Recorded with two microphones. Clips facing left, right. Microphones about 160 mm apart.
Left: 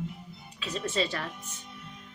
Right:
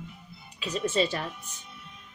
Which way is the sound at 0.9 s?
20° right (ahead or behind).